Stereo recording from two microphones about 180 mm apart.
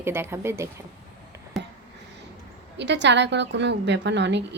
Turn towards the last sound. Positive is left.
turn(degrees=-75)  # may be behind; listen again after turning